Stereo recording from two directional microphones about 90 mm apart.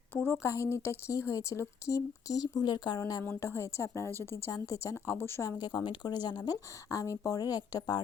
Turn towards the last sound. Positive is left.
turn(degrees=50)  # may be behind; listen again after turning